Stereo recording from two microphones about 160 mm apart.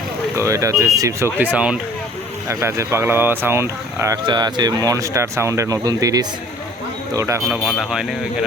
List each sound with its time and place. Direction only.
0.3 s speech: 20° right (ahead or behind)
1.5 s speech: 5° right (ahead or behind)
2.5 s speech: 20° right (ahead or behind)
7.4 s speech: centre (ahead or behind)